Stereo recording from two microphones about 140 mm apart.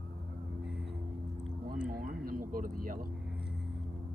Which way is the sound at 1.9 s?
90° right.